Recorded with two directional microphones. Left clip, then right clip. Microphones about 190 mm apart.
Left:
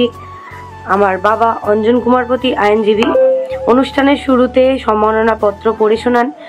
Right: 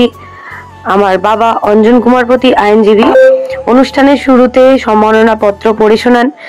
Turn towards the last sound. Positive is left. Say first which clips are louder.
# right 5 dB
turn(degrees=-40)  # may be behind; listen again after turning